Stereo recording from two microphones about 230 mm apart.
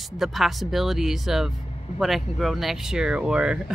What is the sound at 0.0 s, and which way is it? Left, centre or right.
Speech, centre.